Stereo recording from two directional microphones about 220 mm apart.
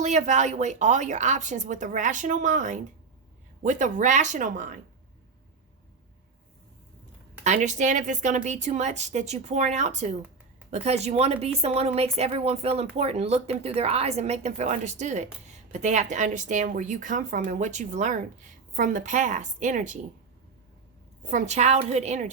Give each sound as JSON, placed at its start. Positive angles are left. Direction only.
{"t": 0.0, "sound": "speech", "side_deg": -35}
{"t": 7.4, "sound": "speech", "side_deg": -30}
{"t": 21.2, "sound": "speech", "side_deg": -35}